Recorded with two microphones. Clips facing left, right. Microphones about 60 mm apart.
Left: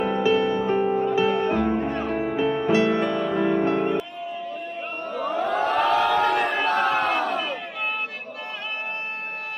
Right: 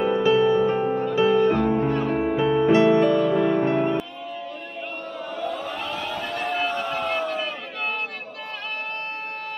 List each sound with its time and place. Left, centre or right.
0.0 s music: centre
2.0 s music: centre
5.1 s a sound: centre
5.4 s crowd: left